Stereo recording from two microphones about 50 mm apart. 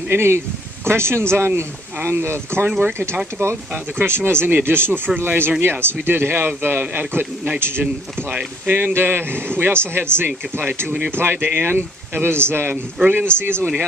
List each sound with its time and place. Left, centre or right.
0.1 s speech: right
2.8 s speech: right
8.3 s speech: right
8.9 s speech: right
13.0 s speech: right
13.4 s speech: right